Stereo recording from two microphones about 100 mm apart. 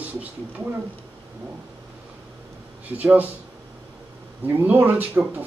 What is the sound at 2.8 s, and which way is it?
Speech, 20° right (ahead or behind).